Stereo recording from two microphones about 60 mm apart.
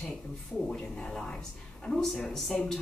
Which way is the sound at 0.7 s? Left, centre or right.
Centre.